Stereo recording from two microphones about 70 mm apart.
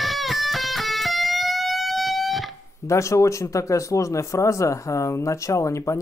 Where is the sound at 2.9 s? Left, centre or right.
Left.